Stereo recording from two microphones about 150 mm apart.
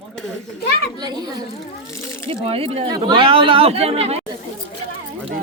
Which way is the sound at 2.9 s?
30° right (ahead or behind).